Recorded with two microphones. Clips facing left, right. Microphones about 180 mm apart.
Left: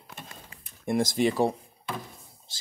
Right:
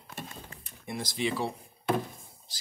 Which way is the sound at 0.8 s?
50° left (ahead or behind).